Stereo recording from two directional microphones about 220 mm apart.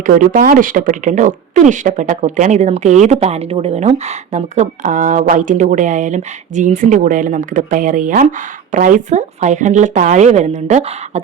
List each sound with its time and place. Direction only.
0.0 s speech: 35° right (ahead or behind)